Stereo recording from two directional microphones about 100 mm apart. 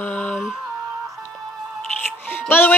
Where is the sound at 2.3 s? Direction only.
20° left (ahead or behind).